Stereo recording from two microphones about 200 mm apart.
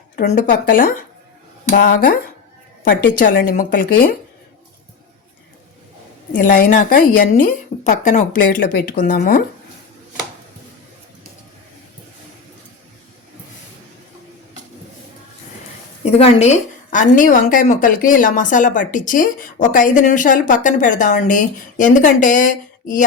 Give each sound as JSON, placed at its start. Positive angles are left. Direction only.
{"t": 0.2, "sound": "a woman's voice", "side_deg": 45}
{"t": 6.3, "sound": "a woman's voice", "side_deg": 40}
{"t": 16.0, "sound": "a woman's voice", "side_deg": 30}